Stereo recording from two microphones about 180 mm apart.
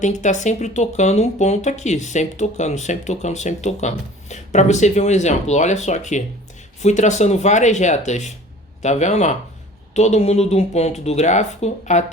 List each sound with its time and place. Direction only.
0.0 s speech: 40° left (ahead or behind)